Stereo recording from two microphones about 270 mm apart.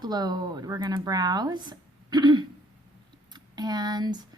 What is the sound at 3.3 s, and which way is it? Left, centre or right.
Speech, centre.